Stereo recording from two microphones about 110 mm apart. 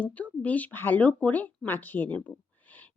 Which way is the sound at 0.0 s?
15° left (ahead or behind).